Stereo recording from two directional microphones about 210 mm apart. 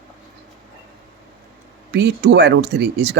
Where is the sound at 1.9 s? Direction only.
55° right (ahead or behind).